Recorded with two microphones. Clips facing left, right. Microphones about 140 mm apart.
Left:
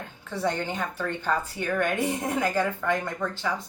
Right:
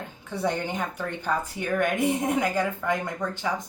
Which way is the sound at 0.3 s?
15° right (ahead or behind).